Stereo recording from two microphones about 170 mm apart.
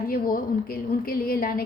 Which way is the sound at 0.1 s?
60° left (ahead or behind).